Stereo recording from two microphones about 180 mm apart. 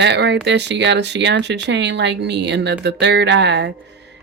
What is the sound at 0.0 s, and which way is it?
Speech, 75° right (ahead or behind).